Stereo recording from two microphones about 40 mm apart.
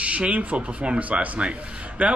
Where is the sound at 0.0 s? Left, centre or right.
Right.